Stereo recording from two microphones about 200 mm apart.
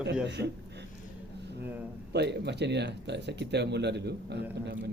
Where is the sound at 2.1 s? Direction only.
55° right (ahead or behind).